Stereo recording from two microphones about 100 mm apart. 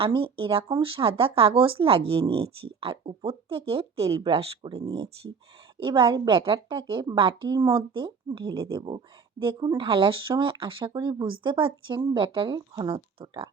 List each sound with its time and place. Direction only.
0.0 s speech: 65° right (ahead or behind)
4.2 s speech: 65° right (ahead or behind)
5.7 s speech: 50° right (ahead or behind)
7.7 s speech: 55° right (ahead or behind)
10.9 s speech: 45° right (ahead or behind); by 13.5 s 65° right (ahead or behind)